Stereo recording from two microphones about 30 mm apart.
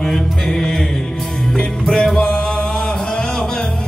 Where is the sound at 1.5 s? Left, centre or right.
Centre.